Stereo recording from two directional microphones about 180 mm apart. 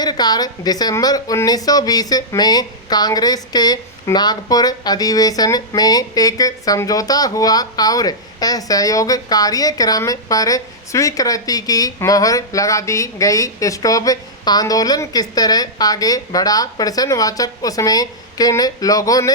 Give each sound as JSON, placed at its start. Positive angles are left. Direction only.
{"t": 0.0, "sound": "a woman's voice", "side_deg": 20}